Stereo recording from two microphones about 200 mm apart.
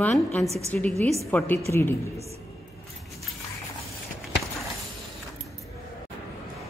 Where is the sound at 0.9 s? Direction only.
30° right (ahead or behind).